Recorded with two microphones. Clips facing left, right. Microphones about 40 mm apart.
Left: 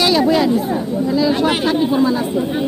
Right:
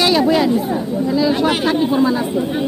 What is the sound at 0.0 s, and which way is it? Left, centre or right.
Speech, centre.